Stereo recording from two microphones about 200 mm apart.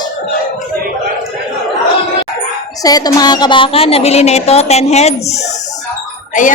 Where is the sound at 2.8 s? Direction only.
20° left (ahead or behind).